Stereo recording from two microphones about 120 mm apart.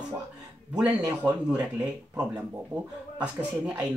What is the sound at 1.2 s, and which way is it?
Speech, 15° right (ahead or behind).